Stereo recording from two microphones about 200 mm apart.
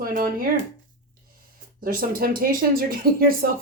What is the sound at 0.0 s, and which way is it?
Speech, 45° right (ahead or behind).